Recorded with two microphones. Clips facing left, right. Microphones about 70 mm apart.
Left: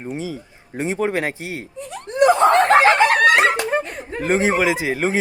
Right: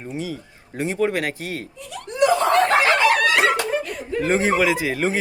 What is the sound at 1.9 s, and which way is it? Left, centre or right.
Snicker, left.